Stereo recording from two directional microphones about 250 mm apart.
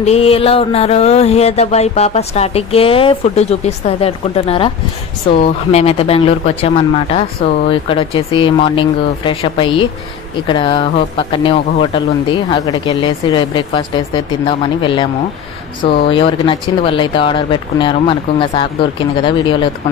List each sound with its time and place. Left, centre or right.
0.0 s music: left
16.1 s music: left